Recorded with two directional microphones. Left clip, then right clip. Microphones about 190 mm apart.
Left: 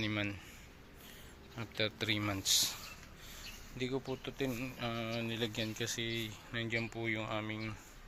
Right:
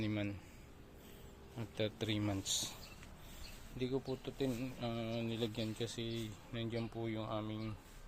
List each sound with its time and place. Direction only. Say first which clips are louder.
0.0 s speech: left 4 dB; 5° right (ahead or behind)
1.5 s speech: left 4 dB; 15° right (ahead or behind)
4.0 s speech: left 2 dB; 5° right (ahead or behind)